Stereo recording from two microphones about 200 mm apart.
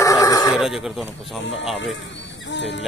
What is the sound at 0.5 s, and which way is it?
Speech, centre (ahead or behind).